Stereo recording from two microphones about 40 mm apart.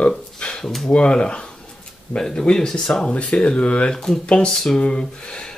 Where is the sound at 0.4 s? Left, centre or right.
Left.